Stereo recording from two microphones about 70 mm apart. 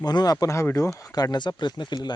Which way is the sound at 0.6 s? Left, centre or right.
Left.